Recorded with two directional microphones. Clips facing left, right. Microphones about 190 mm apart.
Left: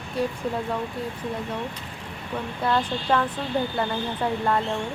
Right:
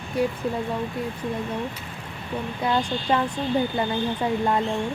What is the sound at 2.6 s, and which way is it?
A woman's voice, 15° right (ahead or behind).